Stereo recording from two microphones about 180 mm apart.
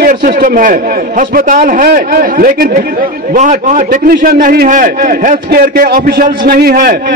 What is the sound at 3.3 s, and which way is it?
A man's voice, 45° right (ahead or behind).